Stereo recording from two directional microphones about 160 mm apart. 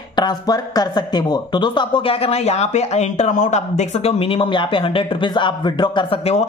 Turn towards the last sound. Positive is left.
turn(degrees=35)  # may be behind; listen again after turning